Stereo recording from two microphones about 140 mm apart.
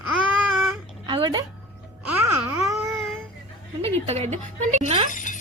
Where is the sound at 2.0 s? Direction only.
15° right (ahead or behind).